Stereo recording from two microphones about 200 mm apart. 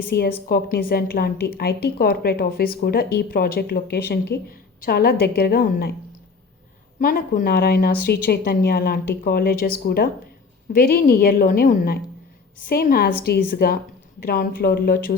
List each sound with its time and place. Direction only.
0.1 s a woman's voice: 50° left (ahead or behind)
7.0 s a woman's voice: 45° left (ahead or behind)